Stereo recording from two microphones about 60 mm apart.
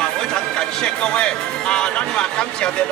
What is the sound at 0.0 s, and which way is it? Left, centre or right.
Speech, centre.